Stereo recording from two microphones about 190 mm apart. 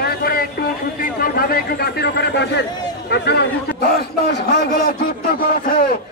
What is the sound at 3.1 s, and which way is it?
A man's voice, 60° left (ahead or behind).